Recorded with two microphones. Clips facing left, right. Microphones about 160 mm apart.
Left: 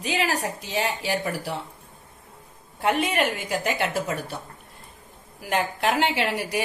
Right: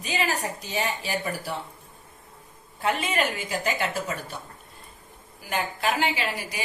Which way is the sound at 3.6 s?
70° left (ahead or behind).